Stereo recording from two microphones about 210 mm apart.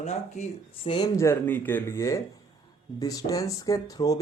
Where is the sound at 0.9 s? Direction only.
20° left (ahead or behind).